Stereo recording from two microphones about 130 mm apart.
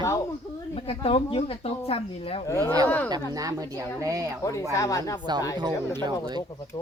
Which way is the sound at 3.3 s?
25° right (ahead or behind).